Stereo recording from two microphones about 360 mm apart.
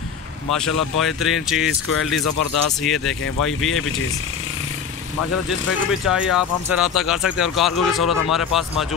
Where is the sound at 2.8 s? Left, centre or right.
Centre.